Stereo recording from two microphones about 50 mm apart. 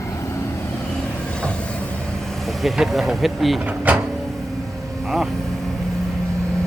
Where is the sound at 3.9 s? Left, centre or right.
Right.